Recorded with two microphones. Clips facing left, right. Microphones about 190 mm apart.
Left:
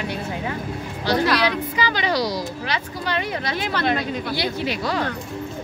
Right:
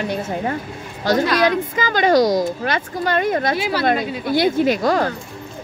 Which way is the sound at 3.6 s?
5° right (ahead or behind).